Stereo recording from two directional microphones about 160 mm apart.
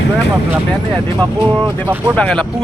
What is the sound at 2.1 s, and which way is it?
Speech, 5° left (ahead or behind).